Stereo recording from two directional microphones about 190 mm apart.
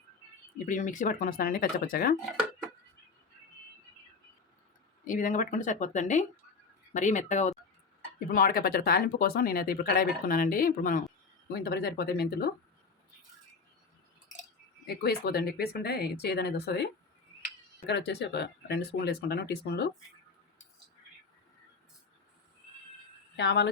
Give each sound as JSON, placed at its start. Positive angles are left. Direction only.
{"t": 0.6, "sound": "speech", "side_deg": 45}
{"t": 5.0, "sound": "speech", "side_deg": 45}
{"t": 8.3, "sound": "speech", "side_deg": 50}
{"t": 11.4, "sound": "speech", "side_deg": 55}
{"t": 14.8, "sound": "speech", "side_deg": 55}
{"t": 23.4, "sound": "speech", "side_deg": 65}